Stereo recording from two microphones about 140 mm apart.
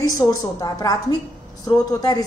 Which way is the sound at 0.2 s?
25° left (ahead or behind).